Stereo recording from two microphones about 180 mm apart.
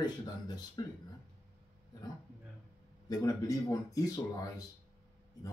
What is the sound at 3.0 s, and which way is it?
Speech, 20° left (ahead or behind).